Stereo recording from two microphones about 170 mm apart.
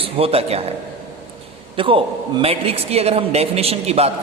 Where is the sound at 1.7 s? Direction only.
30° right (ahead or behind).